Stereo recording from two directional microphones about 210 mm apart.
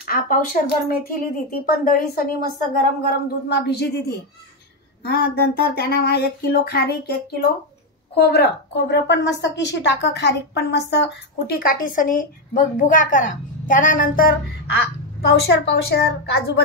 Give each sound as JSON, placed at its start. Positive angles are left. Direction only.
{"t": 0.0, "sound": "a woman's voice", "side_deg": 40}